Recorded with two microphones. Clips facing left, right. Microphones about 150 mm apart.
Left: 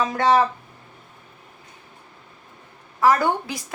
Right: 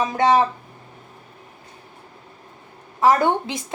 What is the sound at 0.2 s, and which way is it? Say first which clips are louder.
Speech: right 1 dB; 20° right (ahead or behind).